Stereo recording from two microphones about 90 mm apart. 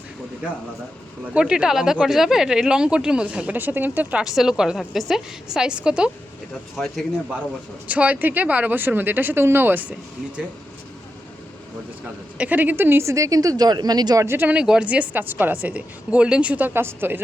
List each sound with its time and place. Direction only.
1.3 s speech: 10° right (ahead or behind)
4.2 s speech: 5° right (ahead or behind)
6.5 s speech: centre (ahead or behind)
7.9 s speech: 15° right (ahead or behind)
12.4 s a woman's voice: 20° right (ahead or behind); by 14.3 s 45° right (ahead or behind)
14.3 s speech: 25° right (ahead or behind)
14.5 s speech: 10° right (ahead or behind)